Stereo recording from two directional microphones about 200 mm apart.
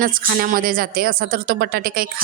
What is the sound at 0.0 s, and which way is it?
Speech, 45° right (ahead or behind).